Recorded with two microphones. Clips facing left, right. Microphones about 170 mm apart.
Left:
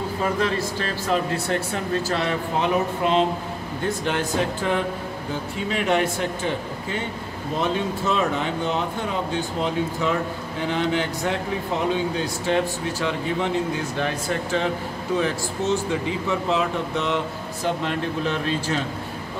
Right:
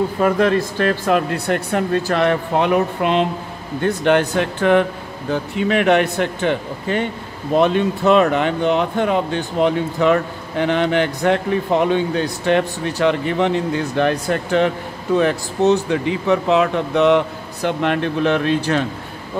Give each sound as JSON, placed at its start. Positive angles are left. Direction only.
{"t": 0.2, "sound": "speech", "side_deg": -60}